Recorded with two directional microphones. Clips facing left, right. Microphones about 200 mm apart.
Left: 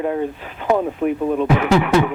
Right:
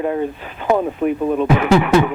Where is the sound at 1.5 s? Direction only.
15° right (ahead or behind).